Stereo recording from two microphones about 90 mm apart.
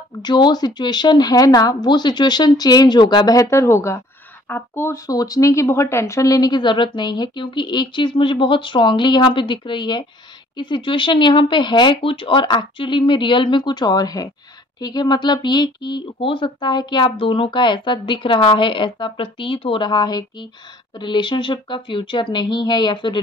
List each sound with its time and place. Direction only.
0.2 s speech: 55° left (ahead or behind)
3.4 s speech: 30° left (ahead or behind); by 16.0 s 55° left (ahead or behind)
16.2 s speech: 70° left (ahead or behind); by 20.2 s 50° left (ahead or behind)
21.0 s speech: 60° left (ahead or behind)